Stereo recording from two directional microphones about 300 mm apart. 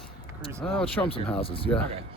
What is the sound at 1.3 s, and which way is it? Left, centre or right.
Speech, centre.